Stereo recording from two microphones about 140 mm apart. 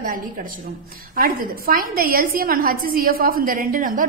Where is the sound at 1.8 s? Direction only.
90° right.